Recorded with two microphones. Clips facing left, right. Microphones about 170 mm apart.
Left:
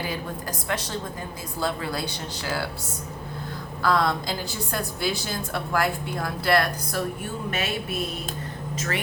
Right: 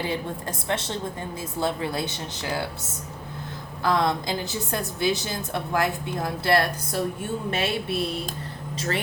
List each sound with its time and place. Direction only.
0.7 s a woman's voice: 25° right (ahead or behind)
3.8 s a woman's voice: 20° right (ahead or behind)
7.5 s a sound: 30° right (ahead or behind)